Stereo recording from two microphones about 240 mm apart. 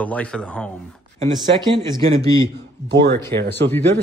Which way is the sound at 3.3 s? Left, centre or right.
Centre.